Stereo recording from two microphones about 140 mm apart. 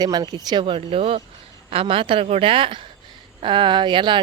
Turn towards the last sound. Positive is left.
turn(degrees=-35)  # may be behind; listen again after turning